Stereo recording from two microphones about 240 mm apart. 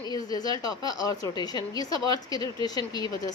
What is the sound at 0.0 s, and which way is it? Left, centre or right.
Speech, centre.